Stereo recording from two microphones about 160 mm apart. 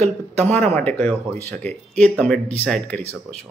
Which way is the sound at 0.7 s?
10° left (ahead or behind).